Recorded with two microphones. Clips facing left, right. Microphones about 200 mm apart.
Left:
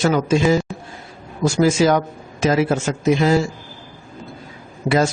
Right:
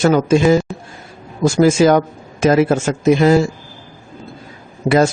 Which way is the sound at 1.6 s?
50° right (ahead or behind).